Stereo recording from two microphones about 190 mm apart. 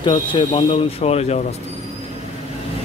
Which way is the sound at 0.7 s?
30° left (ahead or behind).